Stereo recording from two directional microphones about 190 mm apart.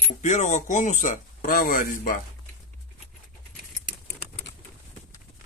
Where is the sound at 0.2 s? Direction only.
40° left (ahead or behind).